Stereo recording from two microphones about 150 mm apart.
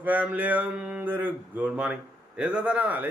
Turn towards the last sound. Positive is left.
turn(degrees=-10)  # may be behind; listen again after turning